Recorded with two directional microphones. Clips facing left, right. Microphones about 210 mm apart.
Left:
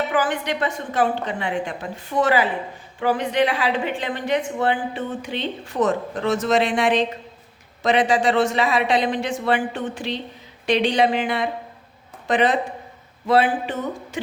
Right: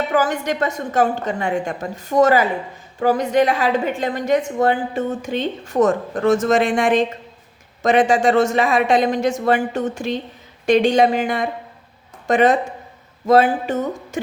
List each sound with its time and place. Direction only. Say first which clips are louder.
0.1 s a woman's voice: right 3 dB; 40° right (ahead or behind)